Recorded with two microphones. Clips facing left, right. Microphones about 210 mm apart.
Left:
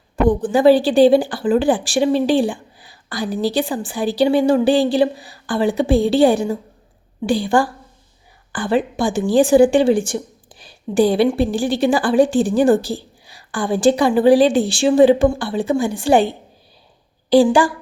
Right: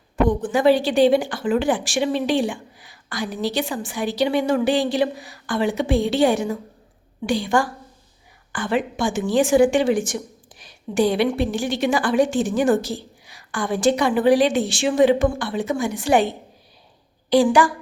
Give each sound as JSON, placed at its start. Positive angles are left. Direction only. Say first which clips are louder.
{"t": 0.3, "sound": "a woman's voice", "louder": "left 6 dB", "side_deg": 35}